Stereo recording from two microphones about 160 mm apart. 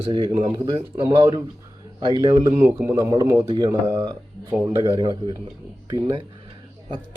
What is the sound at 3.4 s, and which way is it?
Speech, 30° right (ahead or behind).